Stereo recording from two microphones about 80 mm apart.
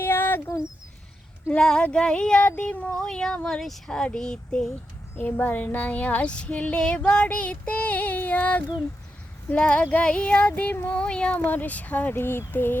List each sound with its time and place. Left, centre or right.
0.0 s a sound: left
1.5 s speech: centre
5.1 s child singing: centre
7.1 s speech: centre
9.5 s child singing: centre